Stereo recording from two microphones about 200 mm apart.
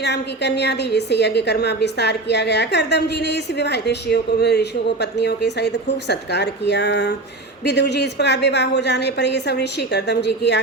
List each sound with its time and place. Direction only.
0.0 s a woman's voice: 55° left (ahead or behind)